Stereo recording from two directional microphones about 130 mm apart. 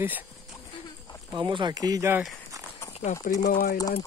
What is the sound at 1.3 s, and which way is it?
Speech, 35° right (ahead or behind).